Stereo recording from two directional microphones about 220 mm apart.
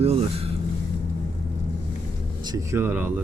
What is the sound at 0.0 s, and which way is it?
Vehicle, 25° right (ahead or behind).